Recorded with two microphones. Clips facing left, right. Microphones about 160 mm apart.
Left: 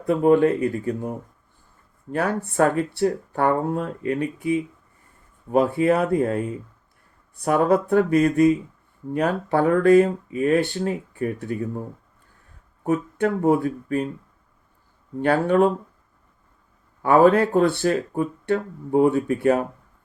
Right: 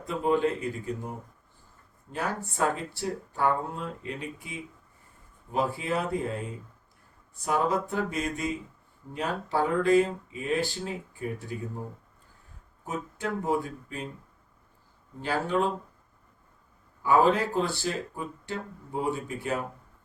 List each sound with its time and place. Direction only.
0.0 s speech: 60° left (ahead or behind)
2.1 s speech: 60° left (ahead or behind)
12.8 s speech: 60° left (ahead or behind)
15.2 s speech: 60° left (ahead or behind)
17.0 s speech: 60° left (ahead or behind)